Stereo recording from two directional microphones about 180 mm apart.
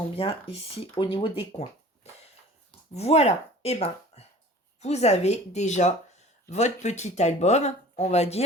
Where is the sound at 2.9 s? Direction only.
35° left (ahead or behind).